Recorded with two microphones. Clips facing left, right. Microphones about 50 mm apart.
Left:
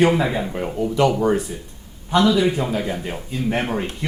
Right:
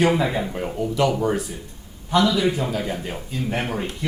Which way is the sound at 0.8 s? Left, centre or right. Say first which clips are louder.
Left 3 dB; centre.